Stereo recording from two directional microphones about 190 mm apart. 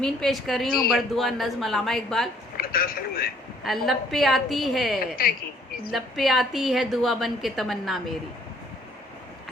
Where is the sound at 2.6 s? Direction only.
50° left (ahead or behind).